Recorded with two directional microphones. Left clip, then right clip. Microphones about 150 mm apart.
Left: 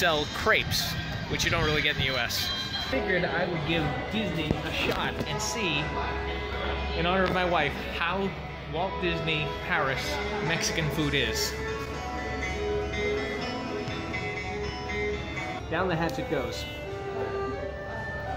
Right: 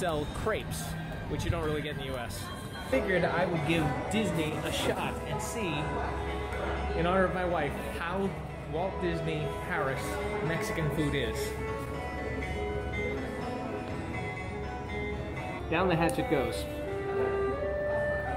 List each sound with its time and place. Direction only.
0.0 s speech: centre (ahead or behind)
3.1 s speech: 20° right (ahead or behind)
5.6 s speech: 15° left (ahead or behind)
7.0 s speech: centre (ahead or behind)
7.3 s speech: 15° left (ahead or behind)
15.7 s speech: 5° right (ahead or behind)